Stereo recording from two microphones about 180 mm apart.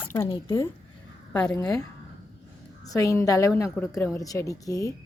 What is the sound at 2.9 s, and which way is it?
Speech, 20° left (ahead or behind).